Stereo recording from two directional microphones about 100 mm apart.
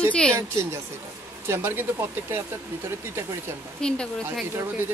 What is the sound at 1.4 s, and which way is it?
Speech, 25° right (ahead or behind).